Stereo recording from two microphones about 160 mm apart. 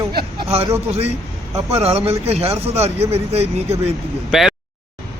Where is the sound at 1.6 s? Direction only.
40° right (ahead or behind).